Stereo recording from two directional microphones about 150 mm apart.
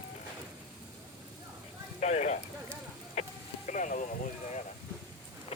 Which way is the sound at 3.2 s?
45° left (ahead or behind).